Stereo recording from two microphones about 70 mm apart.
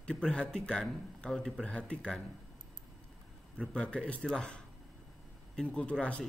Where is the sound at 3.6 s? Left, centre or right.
Centre.